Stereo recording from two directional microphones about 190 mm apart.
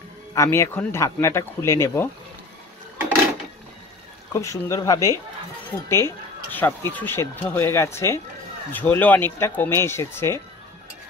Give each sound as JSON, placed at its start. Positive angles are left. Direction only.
{"t": 0.3, "sound": "speech", "side_deg": 15}
{"t": 4.3, "sound": "speech", "side_deg": 15}